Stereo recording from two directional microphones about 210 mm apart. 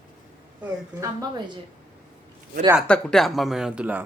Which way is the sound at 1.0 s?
20° right (ahead or behind).